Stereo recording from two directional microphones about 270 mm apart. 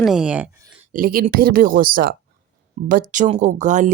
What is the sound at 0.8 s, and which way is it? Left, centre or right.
Speech, right.